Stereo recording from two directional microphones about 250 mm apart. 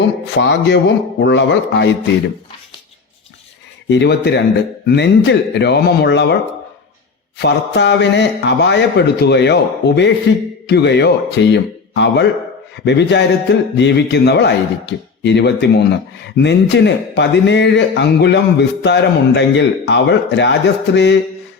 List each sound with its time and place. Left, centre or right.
0.3 s a man's voice: left
3.8 s a man's voice: left
7.3 s a man's voice: left